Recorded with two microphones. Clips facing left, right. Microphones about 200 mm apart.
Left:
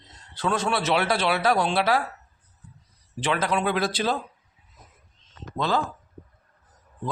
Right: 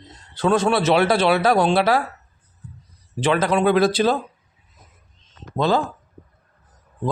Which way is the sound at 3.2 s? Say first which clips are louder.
Right 7 dB; 30° right (ahead or behind).